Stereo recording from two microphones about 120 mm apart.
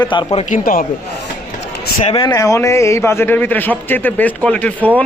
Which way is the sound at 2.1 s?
40° left (ahead or behind).